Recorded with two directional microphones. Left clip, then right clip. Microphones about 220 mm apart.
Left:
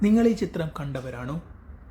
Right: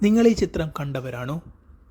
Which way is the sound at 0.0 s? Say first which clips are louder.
Right 4 dB; 35° right (ahead or behind).